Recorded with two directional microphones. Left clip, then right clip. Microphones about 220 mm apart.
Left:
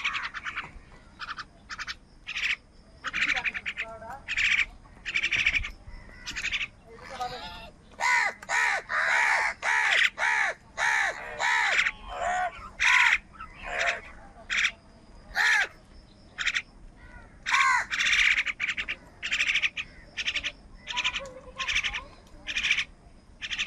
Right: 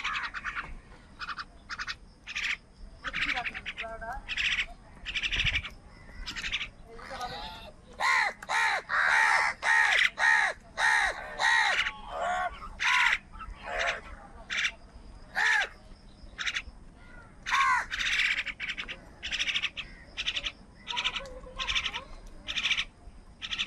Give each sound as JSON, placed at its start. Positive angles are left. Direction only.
{"t": 0.0, "sound": "a sound", "side_deg": 0}
{"t": 3.0, "sound": "duck", "side_deg": 15}
{"t": 4.3, "sound": "bird", "side_deg": 20}
{"t": 9.6, "sound": "crow", "side_deg": -5}
{"t": 9.8, "sound": "crow", "side_deg": 10}
{"t": 10.1, "sound": "crow", "side_deg": -5}
{"t": 12.1, "sound": "fowl", "side_deg": 5}
{"t": 12.7, "sound": "crow", "side_deg": 25}
{"t": 15.3, "sound": "crow", "side_deg": 50}
{"t": 16.3, "sound": "frog", "side_deg": 25}
{"t": 17.4, "sound": "crow", "side_deg": 25}
{"t": 17.9, "sound": "bird", "side_deg": 30}
{"t": 23.4, "sound": "turkey", "side_deg": 15}